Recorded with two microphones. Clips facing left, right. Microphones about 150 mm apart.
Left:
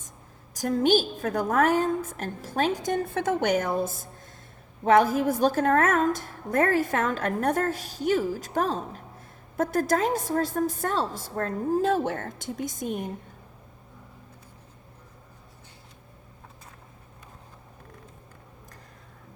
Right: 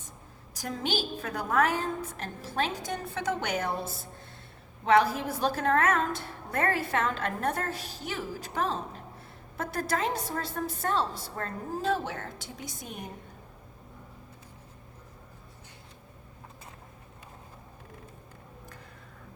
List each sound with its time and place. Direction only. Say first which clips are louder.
0.5 s a woman's voice: left 10 dB; 45° left (ahead or behind)